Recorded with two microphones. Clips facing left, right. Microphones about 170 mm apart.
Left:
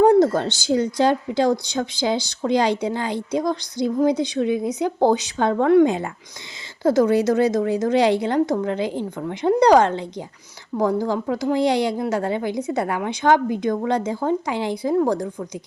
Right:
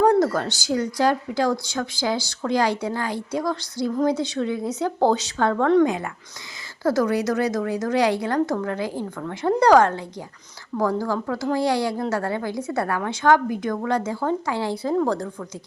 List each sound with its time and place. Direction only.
0.0 s speech: 25° left (ahead or behind)
5.8 s speech: 25° left (ahead or behind)